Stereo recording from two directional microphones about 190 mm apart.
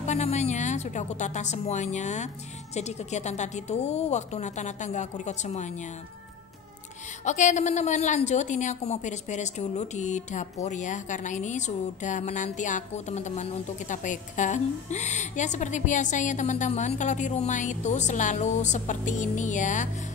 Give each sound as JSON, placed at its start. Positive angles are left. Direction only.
{"t": 0.0, "sound": "a woman's voice", "side_deg": 35}
{"t": 7.2, "sound": "a woman's voice", "side_deg": 40}